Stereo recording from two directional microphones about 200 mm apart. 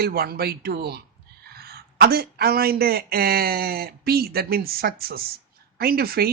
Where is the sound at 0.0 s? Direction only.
50° right (ahead or behind).